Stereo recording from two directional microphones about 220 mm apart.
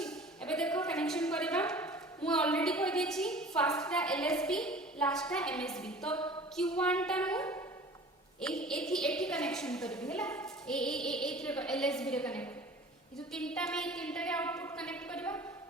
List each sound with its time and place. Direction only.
0.0 s a woman's voice: 5° left (ahead or behind)